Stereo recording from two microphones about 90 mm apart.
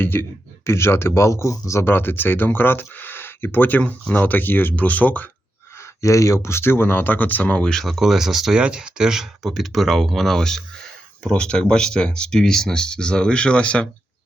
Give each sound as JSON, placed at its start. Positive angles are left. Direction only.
{"t": 0.0, "sound": "speech", "side_deg": 25}
{"t": 5.7, "sound": "speech", "side_deg": 35}